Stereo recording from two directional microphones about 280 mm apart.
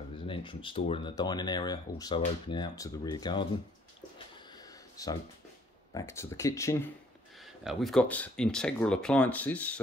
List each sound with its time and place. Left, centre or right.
0.3 s speech: centre
5.0 s speech: centre